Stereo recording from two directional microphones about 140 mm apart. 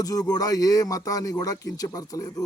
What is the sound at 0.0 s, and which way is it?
Speech, 25° left (ahead or behind).